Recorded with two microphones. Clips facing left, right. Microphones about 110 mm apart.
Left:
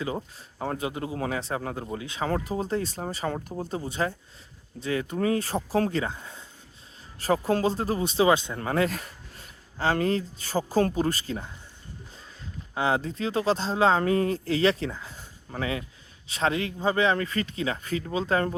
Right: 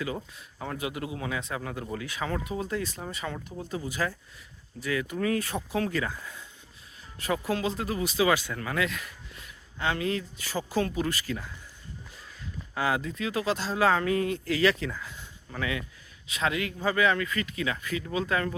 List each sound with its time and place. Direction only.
0.0 s speech: 30° left (ahead or behind)
12.7 s speech: 30° left (ahead or behind)